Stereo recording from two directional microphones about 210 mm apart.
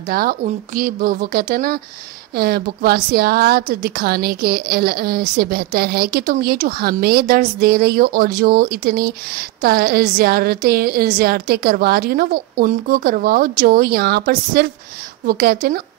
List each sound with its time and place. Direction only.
0.1 s a woman's voice: 45° right (ahead or behind)